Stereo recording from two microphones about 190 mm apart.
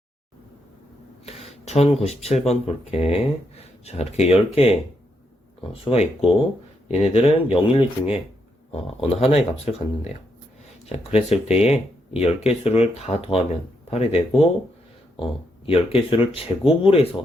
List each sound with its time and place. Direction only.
1.2 s speech: 30° left (ahead or behind)
5.8 s speech: 30° left (ahead or behind)